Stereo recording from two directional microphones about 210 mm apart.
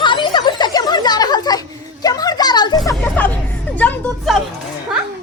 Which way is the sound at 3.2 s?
10° left (ahead or behind).